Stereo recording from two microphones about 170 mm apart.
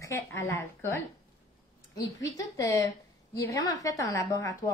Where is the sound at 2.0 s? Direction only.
20° left (ahead or behind).